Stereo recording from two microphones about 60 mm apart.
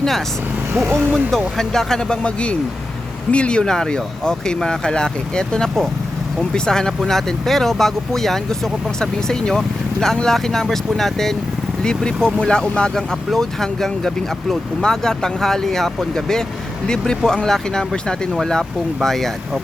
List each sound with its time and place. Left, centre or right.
0.9 s speech: right
1.5 s speech: centre